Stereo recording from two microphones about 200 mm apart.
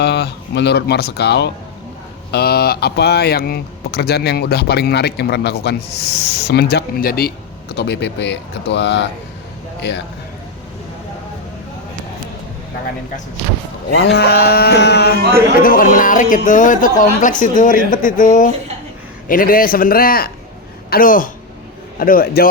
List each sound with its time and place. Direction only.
0.0 s speech: 55° left (ahead or behind)
13.9 s speech: 60° left (ahead or behind)
15.6 s a man's voice: 45° left (ahead or behind)